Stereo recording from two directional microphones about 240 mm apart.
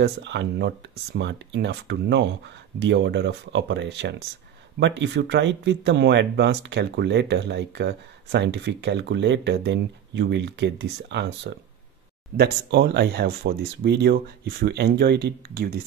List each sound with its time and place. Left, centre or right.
0.0 s speech: right